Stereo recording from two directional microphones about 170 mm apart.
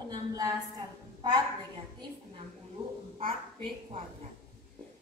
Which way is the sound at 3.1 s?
35° right (ahead or behind).